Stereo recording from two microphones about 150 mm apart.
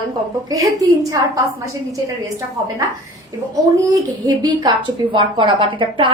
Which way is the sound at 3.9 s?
25° right (ahead or behind).